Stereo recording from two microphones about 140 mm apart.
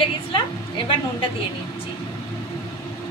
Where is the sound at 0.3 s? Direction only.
35° left (ahead or behind).